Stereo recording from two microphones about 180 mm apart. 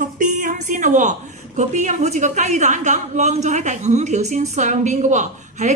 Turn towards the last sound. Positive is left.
turn(degrees=-40)  # may be behind; listen again after turning